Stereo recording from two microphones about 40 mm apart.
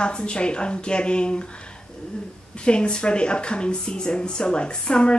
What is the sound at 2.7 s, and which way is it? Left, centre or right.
Speech, left.